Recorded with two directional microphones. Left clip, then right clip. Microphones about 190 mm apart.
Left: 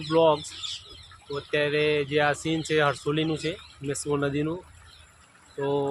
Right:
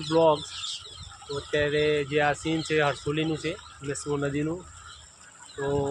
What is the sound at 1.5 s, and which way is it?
Speech, 10° left (ahead or behind).